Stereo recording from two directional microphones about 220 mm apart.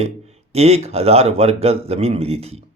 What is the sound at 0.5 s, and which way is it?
Speech, 30° right (ahead or behind).